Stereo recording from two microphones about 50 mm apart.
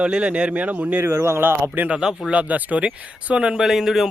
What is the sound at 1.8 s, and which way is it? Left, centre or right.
Speech, right.